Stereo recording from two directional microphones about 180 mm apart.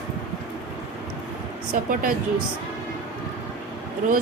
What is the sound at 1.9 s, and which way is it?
Speech, 50° right (ahead or behind).